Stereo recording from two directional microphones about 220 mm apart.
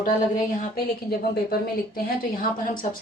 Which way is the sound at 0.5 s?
45° left (ahead or behind).